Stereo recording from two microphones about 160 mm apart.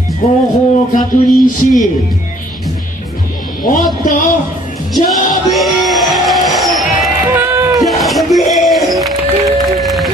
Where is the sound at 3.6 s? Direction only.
55° left (ahead or behind).